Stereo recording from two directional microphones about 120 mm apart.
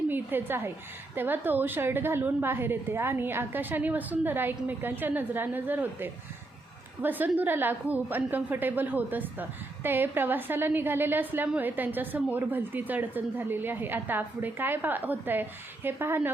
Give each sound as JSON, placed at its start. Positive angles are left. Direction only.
{"t": 0.1, "sound": "a woman's voice", "side_deg": -15}